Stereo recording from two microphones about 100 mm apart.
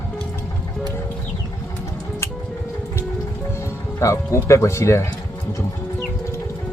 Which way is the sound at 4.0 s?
25° left (ahead or behind).